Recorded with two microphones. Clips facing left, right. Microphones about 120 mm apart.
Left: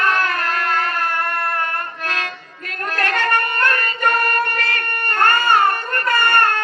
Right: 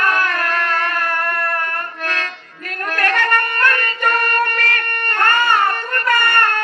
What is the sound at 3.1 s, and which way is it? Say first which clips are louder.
Music: right 1 dB; 30° left (ahead or behind).